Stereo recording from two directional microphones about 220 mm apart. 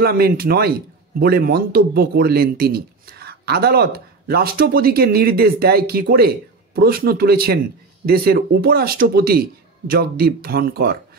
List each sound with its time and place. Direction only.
0.0 s a man's voice: 45° right (ahead or behind)